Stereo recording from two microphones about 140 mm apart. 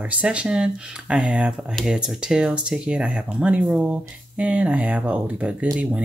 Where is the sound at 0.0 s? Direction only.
10° right (ahead or behind).